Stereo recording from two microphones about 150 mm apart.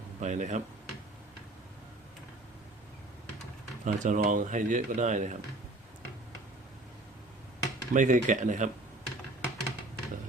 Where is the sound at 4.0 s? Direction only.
60° right (ahead or behind).